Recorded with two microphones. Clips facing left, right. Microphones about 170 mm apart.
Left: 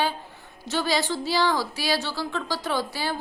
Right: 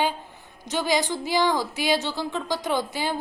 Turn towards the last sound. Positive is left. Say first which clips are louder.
# right 2 dB
turn(degrees=-20)  # may be behind; listen again after turning